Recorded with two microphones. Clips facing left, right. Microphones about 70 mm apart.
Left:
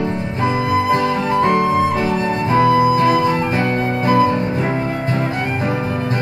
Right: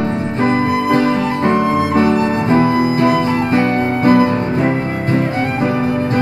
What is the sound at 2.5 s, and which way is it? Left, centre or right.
Music, right.